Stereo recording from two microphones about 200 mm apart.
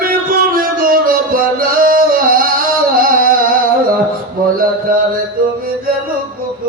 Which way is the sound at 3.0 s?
45° right (ahead or behind).